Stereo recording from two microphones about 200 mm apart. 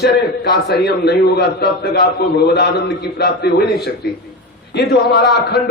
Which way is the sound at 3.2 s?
55° left (ahead or behind).